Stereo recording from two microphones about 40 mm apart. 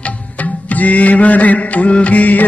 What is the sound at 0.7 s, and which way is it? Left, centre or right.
Music, left.